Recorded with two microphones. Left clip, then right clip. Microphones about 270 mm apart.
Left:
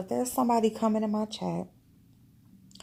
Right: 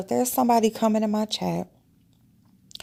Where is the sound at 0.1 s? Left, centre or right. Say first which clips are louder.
Right 6 dB; right.